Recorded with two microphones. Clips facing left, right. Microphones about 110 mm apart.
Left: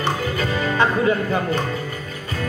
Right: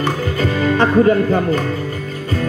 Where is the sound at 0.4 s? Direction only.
40° right (ahead or behind).